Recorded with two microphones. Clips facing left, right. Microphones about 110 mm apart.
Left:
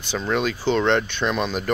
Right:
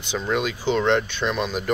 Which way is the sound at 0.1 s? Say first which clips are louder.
Left 1 dB; 10° right (ahead or behind).